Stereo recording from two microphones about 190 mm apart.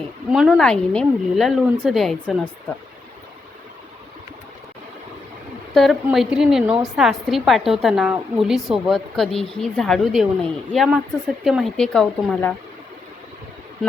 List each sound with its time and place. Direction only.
0.3 s a woman's voice: 5° right (ahead or behind)
5.7 s a woman's voice: centre (ahead or behind)